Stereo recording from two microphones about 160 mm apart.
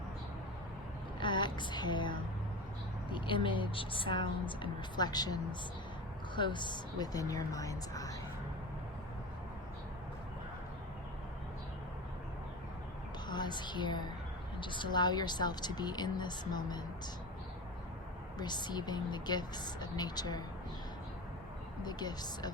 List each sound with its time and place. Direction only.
1.2 s a sound: 30° left (ahead or behind)
3.1 s a woman's voice: 30° left (ahead or behind)
13.2 s a woman's voice: 25° left (ahead or behind)
18.3 s speech: 25° left (ahead or behind)
21.8 s speech: 25° left (ahead or behind)